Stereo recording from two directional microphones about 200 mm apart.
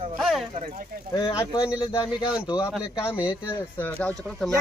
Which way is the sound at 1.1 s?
20° left (ahead or behind).